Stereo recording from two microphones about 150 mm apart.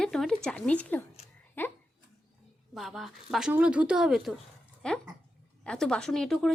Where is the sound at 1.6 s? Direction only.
15° left (ahead or behind).